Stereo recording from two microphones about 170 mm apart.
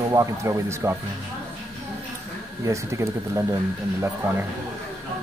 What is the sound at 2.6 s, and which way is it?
Speech, 15° right (ahead or behind).